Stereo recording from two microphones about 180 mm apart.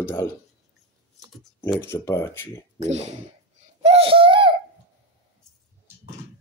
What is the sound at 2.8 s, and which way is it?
Speech, 40° right (ahead or behind).